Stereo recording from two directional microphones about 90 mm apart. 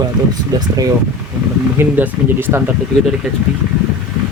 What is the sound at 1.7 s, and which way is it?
Speech, 20° right (ahead or behind).